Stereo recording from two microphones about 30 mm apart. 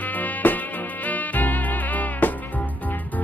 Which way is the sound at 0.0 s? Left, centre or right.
Left.